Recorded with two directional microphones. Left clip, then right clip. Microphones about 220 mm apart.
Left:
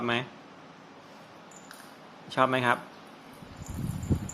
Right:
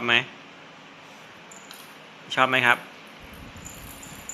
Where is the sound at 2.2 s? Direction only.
20° left (ahead or behind).